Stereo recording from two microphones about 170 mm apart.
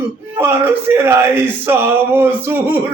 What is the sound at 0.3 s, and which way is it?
Speech, 15° right (ahead or behind).